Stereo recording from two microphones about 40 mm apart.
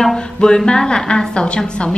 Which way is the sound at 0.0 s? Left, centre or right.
Centre.